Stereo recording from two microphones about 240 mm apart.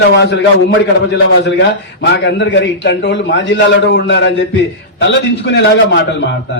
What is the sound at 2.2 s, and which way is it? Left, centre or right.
A man's voice, left.